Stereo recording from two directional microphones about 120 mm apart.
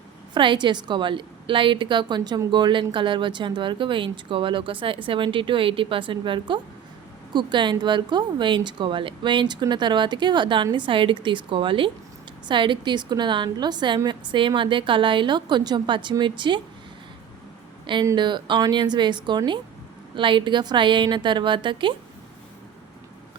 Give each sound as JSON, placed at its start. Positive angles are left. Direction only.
{"t": 0.3, "sound": "speech", "side_deg": -40}
{"t": 18.0, "sound": "speech", "side_deg": -35}